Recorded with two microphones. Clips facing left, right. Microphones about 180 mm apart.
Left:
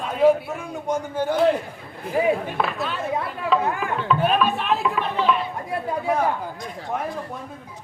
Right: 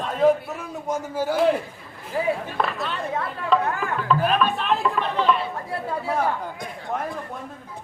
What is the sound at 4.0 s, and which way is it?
Chatter, centre (ahead or behind).